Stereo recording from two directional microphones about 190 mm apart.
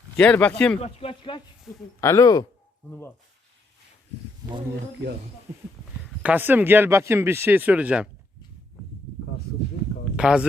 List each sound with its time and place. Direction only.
0.2 s speech: 5° left (ahead or behind)
0.8 s speech: 30° left (ahead or behind)
2.0 s speech: 15° left (ahead or behind)
5.5 s speech: 15° right (ahead or behind)
10.2 s speech: 5° right (ahead or behind)